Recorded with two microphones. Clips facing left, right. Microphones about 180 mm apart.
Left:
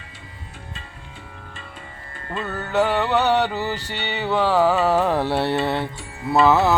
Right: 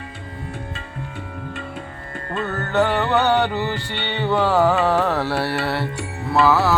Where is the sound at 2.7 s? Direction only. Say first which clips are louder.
Right 1 dB; centre (ahead or behind).